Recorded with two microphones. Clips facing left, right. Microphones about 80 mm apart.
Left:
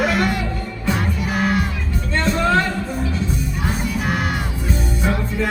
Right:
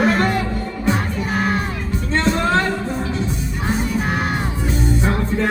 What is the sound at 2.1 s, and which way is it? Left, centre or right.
Music, right.